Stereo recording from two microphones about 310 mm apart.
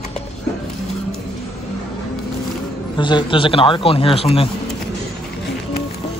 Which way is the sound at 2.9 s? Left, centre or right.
Centre.